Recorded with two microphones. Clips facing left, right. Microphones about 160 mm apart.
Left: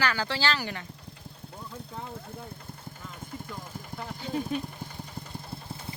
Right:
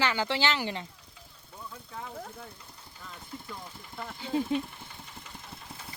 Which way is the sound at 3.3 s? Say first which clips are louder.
Left 1 dB; 45° left (ahead or behind).